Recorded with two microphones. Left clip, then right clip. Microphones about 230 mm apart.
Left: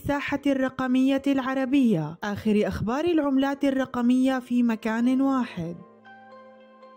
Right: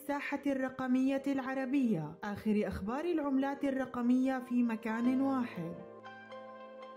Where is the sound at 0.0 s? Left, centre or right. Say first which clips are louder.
Left 10 dB; left.